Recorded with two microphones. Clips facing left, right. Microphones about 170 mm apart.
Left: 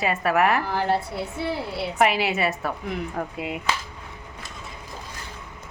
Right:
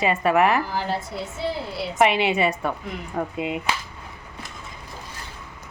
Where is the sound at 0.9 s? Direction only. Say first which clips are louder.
Left 2 dB; 60° left (ahead or behind).